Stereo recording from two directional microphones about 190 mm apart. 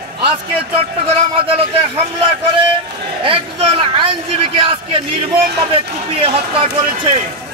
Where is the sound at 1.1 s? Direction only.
35° right (ahead or behind).